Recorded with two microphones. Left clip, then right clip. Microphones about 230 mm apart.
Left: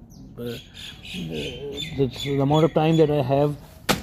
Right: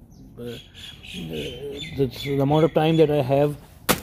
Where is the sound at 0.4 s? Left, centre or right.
Centre.